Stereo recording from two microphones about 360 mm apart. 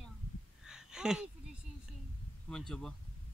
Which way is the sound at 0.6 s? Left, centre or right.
Centre.